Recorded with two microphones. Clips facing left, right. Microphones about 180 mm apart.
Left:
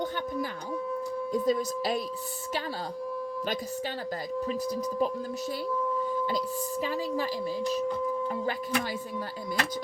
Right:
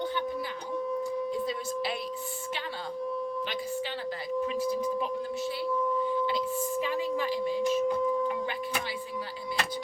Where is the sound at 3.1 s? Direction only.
5° left (ahead or behind).